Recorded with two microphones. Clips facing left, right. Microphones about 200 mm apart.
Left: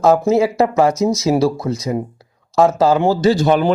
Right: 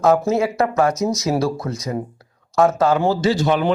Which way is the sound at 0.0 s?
30° left (ahead or behind).